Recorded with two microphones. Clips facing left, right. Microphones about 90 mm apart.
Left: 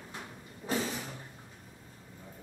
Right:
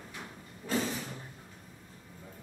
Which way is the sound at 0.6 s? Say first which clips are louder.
Right 1 dB; 25° left (ahead or behind).